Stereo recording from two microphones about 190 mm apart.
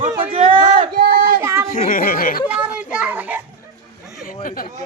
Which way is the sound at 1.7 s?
45° left (ahead or behind).